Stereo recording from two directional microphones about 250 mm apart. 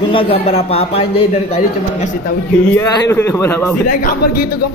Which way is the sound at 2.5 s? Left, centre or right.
Centre.